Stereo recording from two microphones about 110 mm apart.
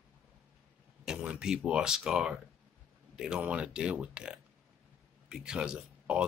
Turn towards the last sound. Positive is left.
turn(degrees=-10)  # may be behind; listen again after turning